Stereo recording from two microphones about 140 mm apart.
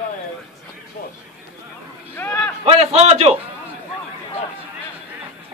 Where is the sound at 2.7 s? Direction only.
45° right (ahead or behind).